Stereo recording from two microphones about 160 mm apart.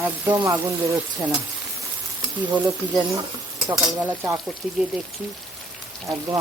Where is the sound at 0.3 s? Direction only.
25° right (ahead or behind).